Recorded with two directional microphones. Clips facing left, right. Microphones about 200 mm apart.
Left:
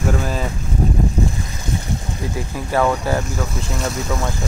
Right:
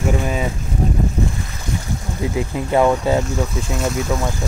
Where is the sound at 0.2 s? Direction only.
5° right (ahead or behind).